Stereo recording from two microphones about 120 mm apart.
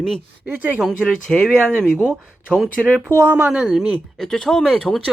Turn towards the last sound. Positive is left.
turn(degrees=5)  # may be behind; listen again after turning